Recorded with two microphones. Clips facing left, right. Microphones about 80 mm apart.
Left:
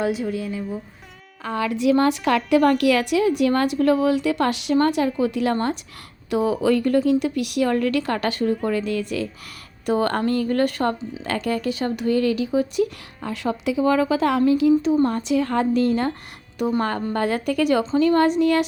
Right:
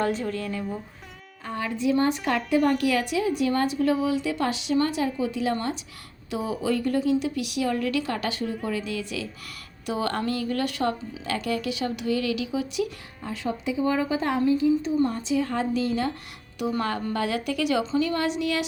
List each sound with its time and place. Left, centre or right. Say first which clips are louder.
0.0 s speech: left 3 dB; centre
1.5 s a woman's voice: left 5 dB; left
13.2 s speech: left 5 dB; left
14.9 s speech: left 4 dB; left